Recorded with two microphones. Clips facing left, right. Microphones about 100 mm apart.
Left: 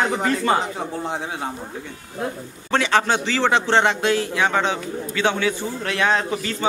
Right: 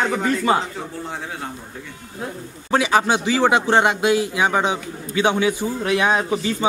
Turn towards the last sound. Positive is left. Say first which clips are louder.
# right 2 dB
turn(degrees=-15)  # may be behind; listen again after turning